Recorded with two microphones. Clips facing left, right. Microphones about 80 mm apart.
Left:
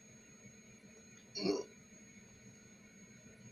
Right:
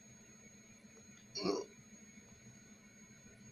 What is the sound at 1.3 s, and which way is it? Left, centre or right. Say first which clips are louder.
Hiccup: left 1 dB; right.